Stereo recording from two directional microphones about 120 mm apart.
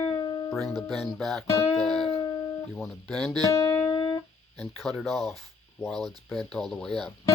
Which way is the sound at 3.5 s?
25° left (ahead or behind).